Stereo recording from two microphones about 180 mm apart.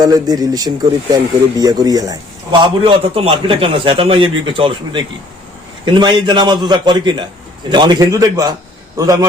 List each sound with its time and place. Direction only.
0.0 s a man's voice: 20° right (ahead or behind)